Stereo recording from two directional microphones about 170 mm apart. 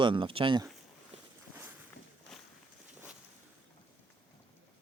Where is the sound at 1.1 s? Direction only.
40° right (ahead or behind).